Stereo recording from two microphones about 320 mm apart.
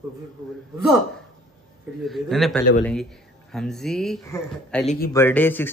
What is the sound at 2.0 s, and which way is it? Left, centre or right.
Speech, centre.